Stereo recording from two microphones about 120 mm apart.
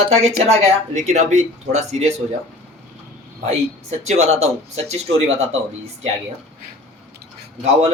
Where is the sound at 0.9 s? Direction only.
80° right.